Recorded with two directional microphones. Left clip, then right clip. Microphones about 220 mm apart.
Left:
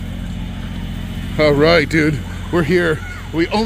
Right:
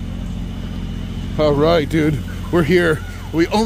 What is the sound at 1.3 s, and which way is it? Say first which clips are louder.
Speech: left 2 dB; 10° left (ahead or behind).